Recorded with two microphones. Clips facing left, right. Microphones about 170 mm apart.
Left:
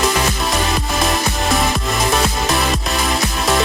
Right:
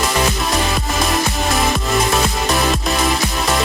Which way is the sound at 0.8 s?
Centre (ahead or behind).